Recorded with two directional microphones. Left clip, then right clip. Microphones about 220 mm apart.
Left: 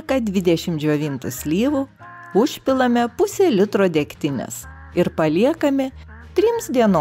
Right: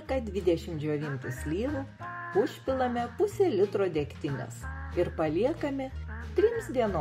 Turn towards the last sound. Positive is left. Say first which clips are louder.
# left 11 dB
turn(degrees=50)  # may be behind; listen again after turning